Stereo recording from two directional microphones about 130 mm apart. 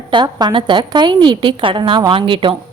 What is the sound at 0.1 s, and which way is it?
A woman's voice, 35° right (ahead or behind).